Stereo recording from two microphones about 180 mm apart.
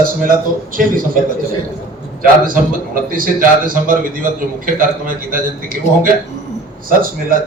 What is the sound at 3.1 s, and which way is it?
A man's voice, 50° right (ahead or behind).